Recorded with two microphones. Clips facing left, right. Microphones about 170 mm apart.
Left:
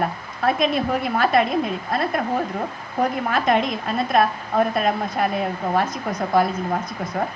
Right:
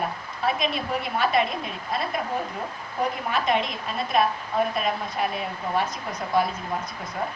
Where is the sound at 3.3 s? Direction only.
45° left (ahead or behind).